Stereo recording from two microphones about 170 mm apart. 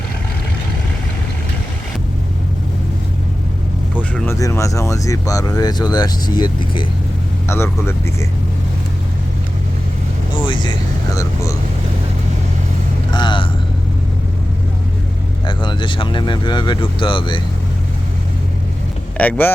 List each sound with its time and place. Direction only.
4.1 s speech: 15° left (ahead or behind)
7.4 s speech: 15° left (ahead or behind)
10.4 s speech: 30° left (ahead or behind)
11.1 s vehicle: 20° left (ahead or behind)
13.1 s vehicle: 25° left (ahead or behind)
15.4 s speech: 30° left (ahead or behind)
19.1 s speech: 10° left (ahead or behind)